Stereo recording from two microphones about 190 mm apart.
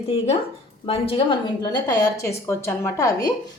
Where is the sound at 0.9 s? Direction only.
30° left (ahead or behind).